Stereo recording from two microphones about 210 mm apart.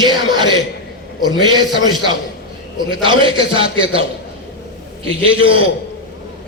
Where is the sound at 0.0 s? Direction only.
20° right (ahead or behind).